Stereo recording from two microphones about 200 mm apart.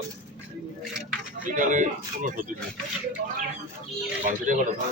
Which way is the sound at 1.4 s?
40° right (ahead or behind).